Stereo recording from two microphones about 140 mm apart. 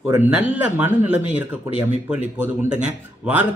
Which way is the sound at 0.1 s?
15° right (ahead or behind).